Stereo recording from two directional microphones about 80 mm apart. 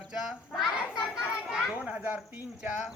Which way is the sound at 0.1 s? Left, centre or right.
Centre.